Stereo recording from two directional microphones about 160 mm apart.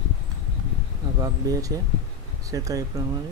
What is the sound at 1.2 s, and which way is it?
Speech, 20° right (ahead or behind).